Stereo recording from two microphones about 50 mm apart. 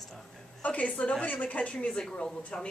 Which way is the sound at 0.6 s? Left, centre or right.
Left.